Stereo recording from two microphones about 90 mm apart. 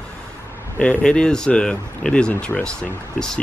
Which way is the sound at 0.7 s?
15° left (ahead or behind).